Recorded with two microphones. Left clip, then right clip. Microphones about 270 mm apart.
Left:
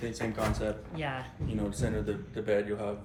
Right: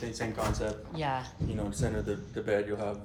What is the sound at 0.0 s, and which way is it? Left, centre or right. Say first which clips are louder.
A man's voice: left 1 dB; right.